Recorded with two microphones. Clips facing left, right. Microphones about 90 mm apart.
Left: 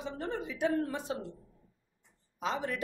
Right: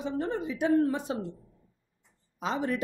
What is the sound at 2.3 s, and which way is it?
Speech, 25° right (ahead or behind).